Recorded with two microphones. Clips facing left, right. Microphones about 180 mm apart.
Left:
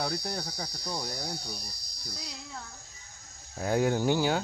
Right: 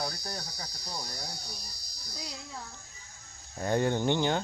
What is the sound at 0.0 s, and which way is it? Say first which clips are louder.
Cricket: left 4 dB; 65° left (ahead or behind).